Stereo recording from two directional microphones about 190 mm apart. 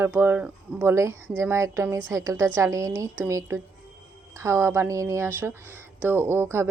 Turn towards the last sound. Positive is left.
turn(degrees=-15)  # may be behind; listen again after turning